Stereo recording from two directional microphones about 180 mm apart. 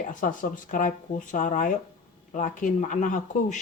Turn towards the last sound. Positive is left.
turn(degrees=45)  # may be behind; listen again after turning